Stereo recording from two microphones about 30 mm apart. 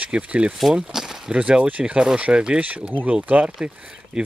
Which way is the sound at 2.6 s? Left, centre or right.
Right.